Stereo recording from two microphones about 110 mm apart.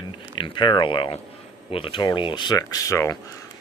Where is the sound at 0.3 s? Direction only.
50° left (ahead or behind).